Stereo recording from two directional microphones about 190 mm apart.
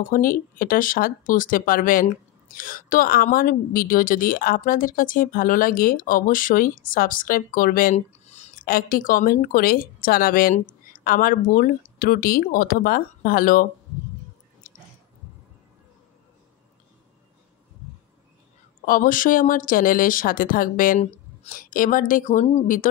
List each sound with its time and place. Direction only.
0.1 s speech: 45° left (ahead or behind)
8.6 s speech: 50° left (ahead or behind)
18.9 s speech: 45° left (ahead or behind)